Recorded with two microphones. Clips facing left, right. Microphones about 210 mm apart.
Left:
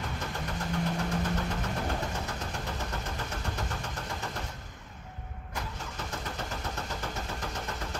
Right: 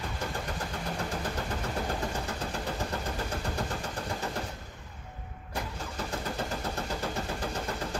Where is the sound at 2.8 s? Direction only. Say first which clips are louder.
Right 3 dB; 30° right (ahead or behind).